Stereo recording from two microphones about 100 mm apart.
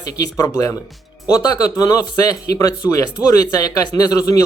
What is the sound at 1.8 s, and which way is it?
Speech, 40° left (ahead or behind).